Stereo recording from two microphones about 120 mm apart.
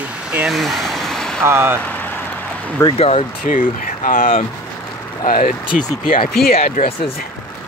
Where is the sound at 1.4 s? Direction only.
20° right (ahead or behind).